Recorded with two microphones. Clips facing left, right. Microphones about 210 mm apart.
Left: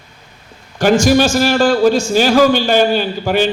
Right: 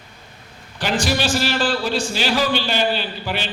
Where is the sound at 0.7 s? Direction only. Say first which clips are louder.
Left 11 dB; 45° left (ahead or behind).